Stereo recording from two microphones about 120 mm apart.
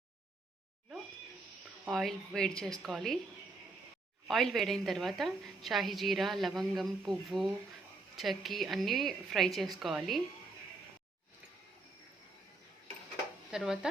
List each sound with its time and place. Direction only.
1.9 s a woman's voice: centre (ahead or behind)
4.3 s a woman's voice: centre (ahead or behind)
13.5 s a woman's voice: 5° right (ahead or behind)